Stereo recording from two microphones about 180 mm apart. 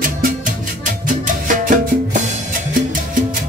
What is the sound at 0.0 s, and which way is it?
Music, 50° right (ahead or behind).